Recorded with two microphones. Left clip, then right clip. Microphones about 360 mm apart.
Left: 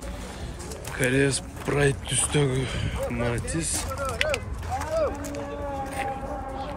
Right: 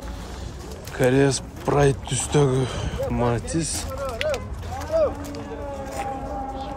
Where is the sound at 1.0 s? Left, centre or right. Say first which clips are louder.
Right 4 dB; centre.